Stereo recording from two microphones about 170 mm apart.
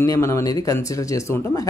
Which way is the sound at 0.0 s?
15° left (ahead or behind).